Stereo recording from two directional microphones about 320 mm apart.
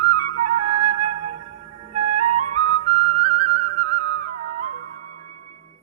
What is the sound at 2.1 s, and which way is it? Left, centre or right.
Music, centre.